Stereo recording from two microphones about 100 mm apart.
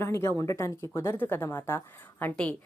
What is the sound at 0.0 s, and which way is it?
A woman's voice, 25° left (ahead or behind).